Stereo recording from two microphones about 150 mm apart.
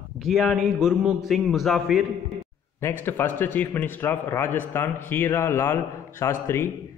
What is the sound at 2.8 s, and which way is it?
A man's voice, 15° left (ahead or behind).